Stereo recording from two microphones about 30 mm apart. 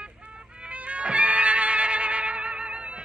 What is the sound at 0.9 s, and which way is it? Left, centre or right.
Cat, right.